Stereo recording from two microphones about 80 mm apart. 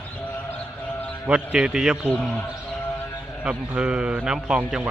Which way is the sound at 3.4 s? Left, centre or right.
Centre.